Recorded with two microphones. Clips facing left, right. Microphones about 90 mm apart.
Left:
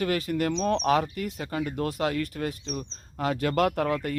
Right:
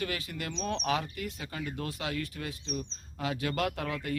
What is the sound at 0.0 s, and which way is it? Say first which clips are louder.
Speech: left 10 dB; 45° left (ahead or behind).